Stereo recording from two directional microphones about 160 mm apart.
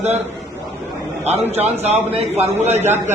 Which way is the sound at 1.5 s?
45° right (ahead or behind).